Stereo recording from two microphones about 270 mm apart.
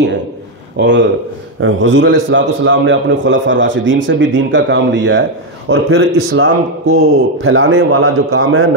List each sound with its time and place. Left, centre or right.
0.7 s a man's voice: right